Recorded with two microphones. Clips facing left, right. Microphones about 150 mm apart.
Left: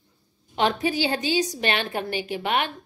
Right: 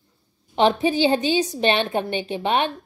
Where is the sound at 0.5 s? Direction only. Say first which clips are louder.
Right 5 dB; 20° right (ahead or behind).